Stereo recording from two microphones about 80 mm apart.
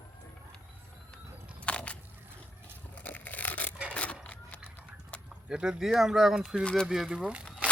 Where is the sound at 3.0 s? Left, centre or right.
Left.